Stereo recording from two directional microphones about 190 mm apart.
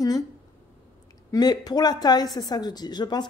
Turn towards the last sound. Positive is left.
turn(degrees=20)  # may be behind; listen again after turning